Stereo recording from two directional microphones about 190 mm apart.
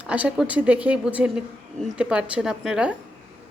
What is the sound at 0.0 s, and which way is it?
A woman's voice, 5° right (ahead or behind).